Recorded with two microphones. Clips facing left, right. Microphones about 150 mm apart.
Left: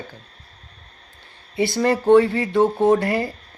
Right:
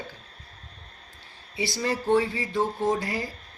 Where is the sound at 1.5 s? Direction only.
55° left (ahead or behind).